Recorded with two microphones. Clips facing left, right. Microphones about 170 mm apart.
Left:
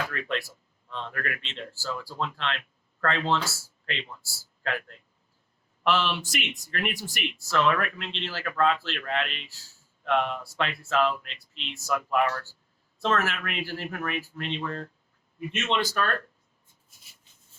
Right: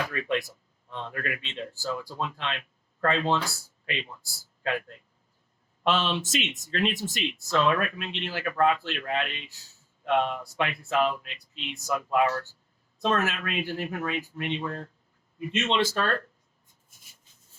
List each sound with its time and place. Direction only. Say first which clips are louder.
0.1 s speech: right 3 dB; 15° right (ahead or behind)